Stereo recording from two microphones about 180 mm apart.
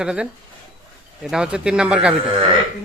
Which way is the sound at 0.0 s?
5° right (ahead or behind).